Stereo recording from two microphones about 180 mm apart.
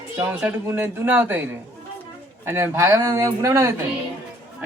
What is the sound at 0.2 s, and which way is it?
Speech, 10° right (ahead or behind).